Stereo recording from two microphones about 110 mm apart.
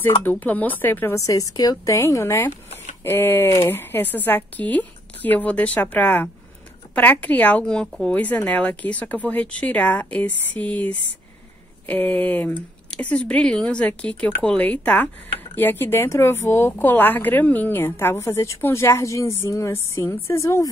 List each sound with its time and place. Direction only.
0.2 s speech: 15° left (ahead or behind)
1.1 s a woman's voice: 30° left (ahead or behind)